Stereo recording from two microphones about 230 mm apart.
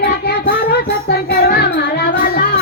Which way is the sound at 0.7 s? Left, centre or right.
Left.